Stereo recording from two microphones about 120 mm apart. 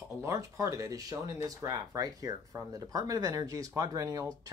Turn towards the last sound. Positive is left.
turn(degrees=-30)  # may be behind; listen again after turning